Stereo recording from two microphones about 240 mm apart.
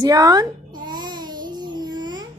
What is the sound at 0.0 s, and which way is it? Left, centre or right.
Babbling, centre.